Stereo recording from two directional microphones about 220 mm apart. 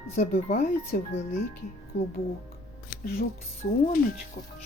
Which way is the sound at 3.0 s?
45° left (ahead or behind).